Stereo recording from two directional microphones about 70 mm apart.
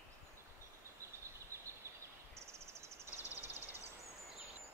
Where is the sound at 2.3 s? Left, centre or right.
Right.